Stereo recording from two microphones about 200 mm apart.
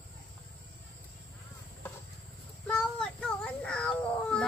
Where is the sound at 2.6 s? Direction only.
5° left (ahead or behind).